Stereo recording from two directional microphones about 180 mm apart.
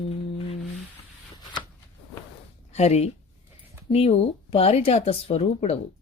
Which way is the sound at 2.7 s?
35° left (ahead or behind).